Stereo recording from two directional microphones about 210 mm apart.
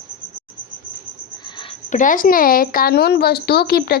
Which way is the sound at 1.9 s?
40° left (ahead or behind).